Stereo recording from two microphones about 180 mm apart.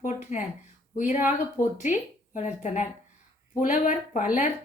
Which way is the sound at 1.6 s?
15° left (ahead or behind).